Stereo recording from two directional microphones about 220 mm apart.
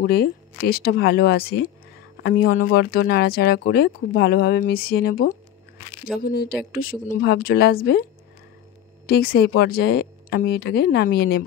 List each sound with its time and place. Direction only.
0.0 s speech: 45° left (ahead or behind)
9.0 s speech: 45° left (ahead or behind)